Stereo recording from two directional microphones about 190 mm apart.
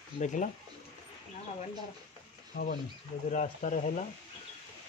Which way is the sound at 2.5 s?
45° left (ahead or behind).